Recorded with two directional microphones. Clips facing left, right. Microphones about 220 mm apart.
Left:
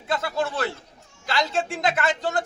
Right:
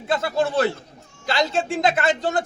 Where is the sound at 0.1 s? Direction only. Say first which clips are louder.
Right 4 dB; 25° right (ahead or behind).